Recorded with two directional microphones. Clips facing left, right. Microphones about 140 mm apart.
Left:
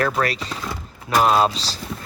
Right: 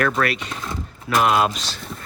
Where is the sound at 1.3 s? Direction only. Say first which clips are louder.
Left 1 dB; 30° left (ahead or behind).